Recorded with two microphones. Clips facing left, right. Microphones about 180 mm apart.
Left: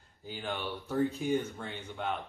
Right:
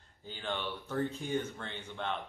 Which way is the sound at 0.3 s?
10° left (ahead or behind).